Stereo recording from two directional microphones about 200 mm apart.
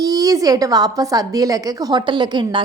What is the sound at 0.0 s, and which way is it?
A woman's voice, 20° right (ahead or behind).